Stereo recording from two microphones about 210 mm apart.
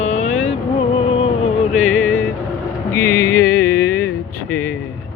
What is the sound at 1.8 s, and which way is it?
Music, 5° left (ahead or behind).